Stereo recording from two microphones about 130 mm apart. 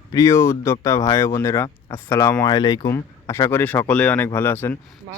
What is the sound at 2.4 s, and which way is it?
Speech, 30° left (ahead or behind).